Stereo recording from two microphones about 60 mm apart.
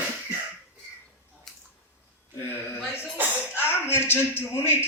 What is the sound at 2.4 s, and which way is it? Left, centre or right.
A man's voice, left.